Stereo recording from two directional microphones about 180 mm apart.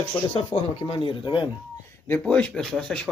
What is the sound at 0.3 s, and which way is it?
Speech, 30° left (ahead or behind).